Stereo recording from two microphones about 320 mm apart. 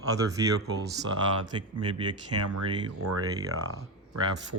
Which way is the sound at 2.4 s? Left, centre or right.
Right.